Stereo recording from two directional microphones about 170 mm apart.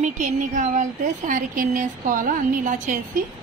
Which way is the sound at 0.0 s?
50° right (ahead or behind).